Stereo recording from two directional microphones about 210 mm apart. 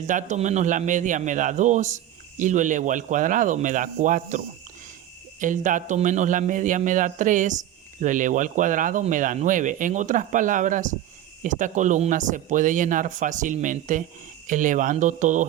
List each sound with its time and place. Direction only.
0.1 s speech: 35° right (ahead or behind)